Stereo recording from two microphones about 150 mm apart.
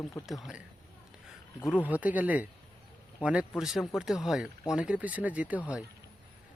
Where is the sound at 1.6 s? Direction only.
5° right (ahead or behind).